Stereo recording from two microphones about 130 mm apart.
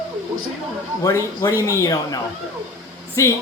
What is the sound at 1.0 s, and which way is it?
Speech, 25° left (ahead or behind).